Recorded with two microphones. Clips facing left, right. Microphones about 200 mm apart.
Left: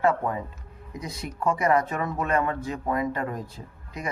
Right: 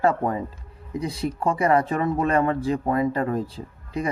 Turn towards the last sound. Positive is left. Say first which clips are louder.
# right 8 dB
turn(degrees=-30)  # may be behind; listen again after turning